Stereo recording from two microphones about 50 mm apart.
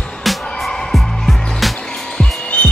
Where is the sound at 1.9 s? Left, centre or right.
Centre.